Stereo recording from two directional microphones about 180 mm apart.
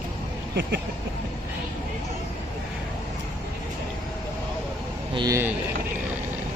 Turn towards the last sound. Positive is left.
turn(degrees=-20)  # may be behind; listen again after turning